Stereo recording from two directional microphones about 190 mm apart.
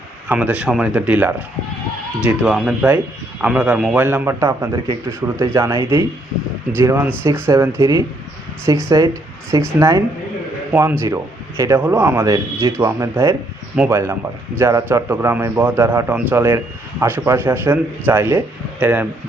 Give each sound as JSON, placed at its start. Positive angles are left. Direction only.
{"t": 0.3, "sound": "a man's voice", "side_deg": -5}